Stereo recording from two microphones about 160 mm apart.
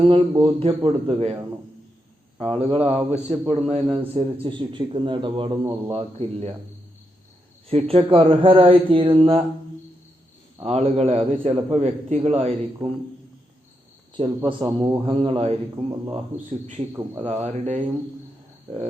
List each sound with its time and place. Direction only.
0.0 s a man's voice: 35° right (ahead or behind)
2.4 s a man's voice: 35° right (ahead or behind)
7.7 s a man's voice: 40° right (ahead or behind)
10.6 s a man's voice: 40° right (ahead or behind)
14.2 s a man's voice: 30° right (ahead or behind)
15.7 s a man's voice: 25° right (ahead or behind)
17.2 s speech: 45° right (ahead or behind)